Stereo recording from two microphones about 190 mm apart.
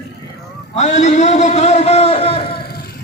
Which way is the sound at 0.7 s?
35° left (ahead or behind).